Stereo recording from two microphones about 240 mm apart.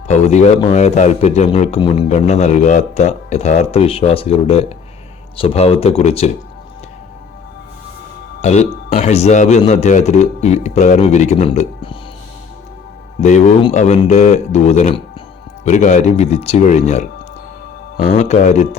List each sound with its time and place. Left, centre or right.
0.1 s a man's voice: left
8.4 s a man's voice: left
13.2 s a man's voice: left